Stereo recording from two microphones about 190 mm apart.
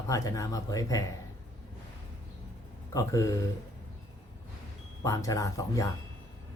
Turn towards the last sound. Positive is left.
turn(degrees=15)  # may be behind; listen again after turning